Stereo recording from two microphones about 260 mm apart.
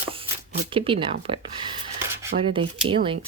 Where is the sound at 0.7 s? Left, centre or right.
Right.